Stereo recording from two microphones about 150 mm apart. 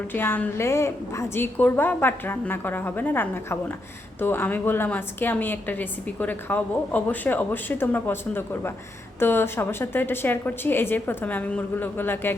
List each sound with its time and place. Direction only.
0.1 s a woman's voice: 15° left (ahead or behind)